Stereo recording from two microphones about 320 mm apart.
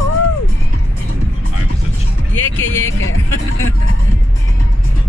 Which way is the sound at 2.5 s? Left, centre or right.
Left.